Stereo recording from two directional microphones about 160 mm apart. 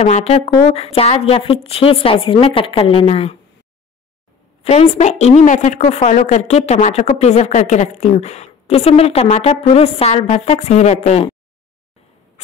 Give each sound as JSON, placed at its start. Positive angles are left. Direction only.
{"t": 0.0, "sound": "a woman's voice", "side_deg": 40}
{"t": 4.6, "sound": "a woman's voice", "side_deg": 40}